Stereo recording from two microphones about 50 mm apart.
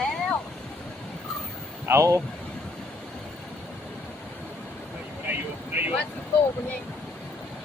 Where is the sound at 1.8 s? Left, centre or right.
Right.